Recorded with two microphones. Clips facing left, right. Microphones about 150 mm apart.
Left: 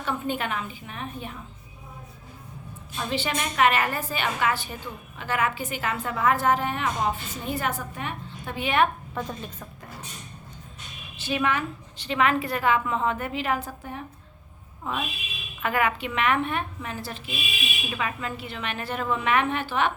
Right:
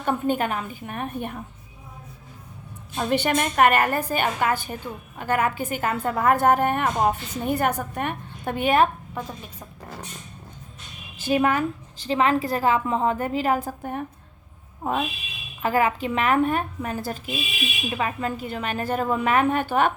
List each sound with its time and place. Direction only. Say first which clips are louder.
0.0 s a woman's voice: right 5 dB; 45° right (ahead or behind)
2.9 s a woman's voice: right 6 dB; 50° right (ahead or behind)
9.1 s speech: left 1 dB; 10° right (ahead or behind)
11.3 s a woman's voice: right 5 dB; 40° right (ahead or behind)
15.6 s a woman's voice: right 4 dB; 35° right (ahead or behind)